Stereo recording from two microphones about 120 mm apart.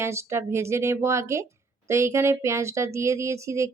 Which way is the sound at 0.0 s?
20° right (ahead or behind).